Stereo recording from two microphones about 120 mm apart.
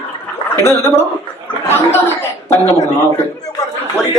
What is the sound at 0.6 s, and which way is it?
Speech, 20° left (ahead or behind).